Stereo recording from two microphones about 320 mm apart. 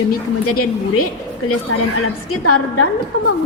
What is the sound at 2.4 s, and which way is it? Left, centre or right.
Speech, left.